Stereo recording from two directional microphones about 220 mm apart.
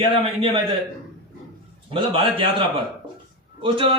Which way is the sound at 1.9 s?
25° right (ahead or behind).